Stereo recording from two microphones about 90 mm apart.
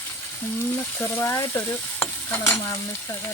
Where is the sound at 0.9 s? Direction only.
25° left (ahead or behind).